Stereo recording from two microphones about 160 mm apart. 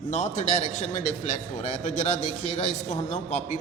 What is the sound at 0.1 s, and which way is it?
A man's voice, 50° left (ahead or behind).